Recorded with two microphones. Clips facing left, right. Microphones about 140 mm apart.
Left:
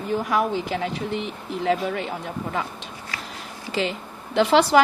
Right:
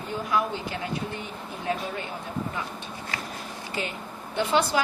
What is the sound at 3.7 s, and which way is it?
Speech, 90° left.